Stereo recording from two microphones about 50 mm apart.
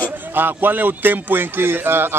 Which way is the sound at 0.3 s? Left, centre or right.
Right.